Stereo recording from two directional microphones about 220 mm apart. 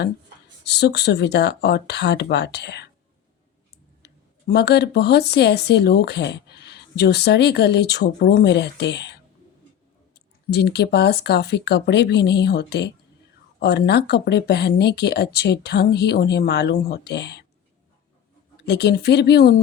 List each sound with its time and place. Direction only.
0.6 s speech: 50° left (ahead or behind)
4.0 s speech: 50° left (ahead or behind)
10.5 s speech: 50° left (ahead or behind)
18.5 s speech: 50° left (ahead or behind)